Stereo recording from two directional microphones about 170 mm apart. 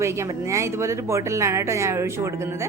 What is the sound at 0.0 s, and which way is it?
A woman's voice, 15° right (ahead or behind).